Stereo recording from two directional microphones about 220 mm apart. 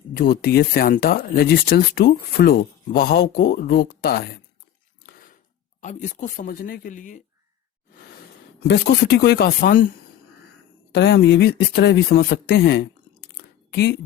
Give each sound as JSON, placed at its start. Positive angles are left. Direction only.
{"t": 0.1, "sound": "speech", "side_deg": 45}
{"t": 5.0, "sound": "a sound", "side_deg": 40}
{"t": 5.8, "sound": "speech", "side_deg": 35}
{"t": 8.6, "sound": "speech", "side_deg": 50}
{"t": 10.9, "sound": "speech", "side_deg": 50}
{"t": 13.3, "sound": "a sound", "side_deg": 45}